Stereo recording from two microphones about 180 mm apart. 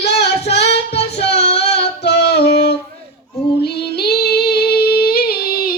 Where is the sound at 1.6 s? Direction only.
70° left (ahead or behind).